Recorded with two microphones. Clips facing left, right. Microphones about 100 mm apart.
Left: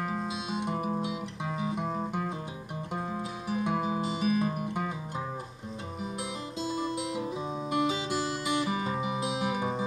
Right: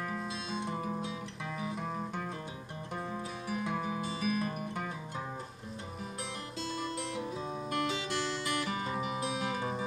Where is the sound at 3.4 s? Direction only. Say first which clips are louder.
Left 6 dB; 20° left (ahead or behind).